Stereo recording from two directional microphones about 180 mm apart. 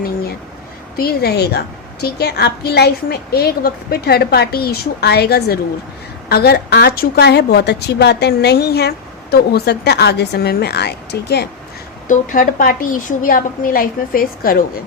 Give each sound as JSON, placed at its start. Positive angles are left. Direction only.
{"t": 0.9, "sound": "a woman's voice", "side_deg": 60}
{"t": 12.0, "sound": "a woman's voice", "side_deg": 50}